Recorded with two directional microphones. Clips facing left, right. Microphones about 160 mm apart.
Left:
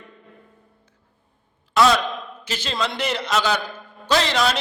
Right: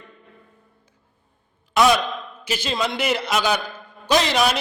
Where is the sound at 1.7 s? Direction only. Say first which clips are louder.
Even; 15° right (ahead or behind).